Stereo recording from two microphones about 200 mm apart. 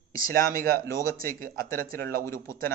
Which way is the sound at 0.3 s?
45° right (ahead or behind).